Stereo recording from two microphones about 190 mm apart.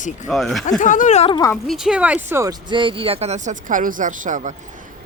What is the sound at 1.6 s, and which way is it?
Speech, centre (ahead or behind).